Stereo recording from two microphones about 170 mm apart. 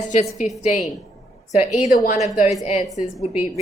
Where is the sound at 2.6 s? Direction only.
40° left (ahead or behind).